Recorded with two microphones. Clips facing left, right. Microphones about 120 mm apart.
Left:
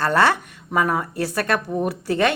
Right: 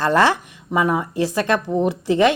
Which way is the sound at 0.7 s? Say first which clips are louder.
Right 2 dB; 15° right (ahead or behind).